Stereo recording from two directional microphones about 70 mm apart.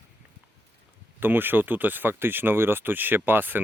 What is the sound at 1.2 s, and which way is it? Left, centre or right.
Speech, right.